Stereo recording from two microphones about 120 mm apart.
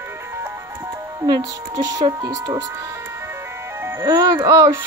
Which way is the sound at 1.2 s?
30° right (ahead or behind).